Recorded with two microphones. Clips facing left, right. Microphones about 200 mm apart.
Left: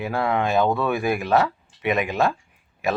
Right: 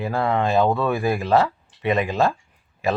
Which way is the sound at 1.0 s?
30° right (ahead or behind).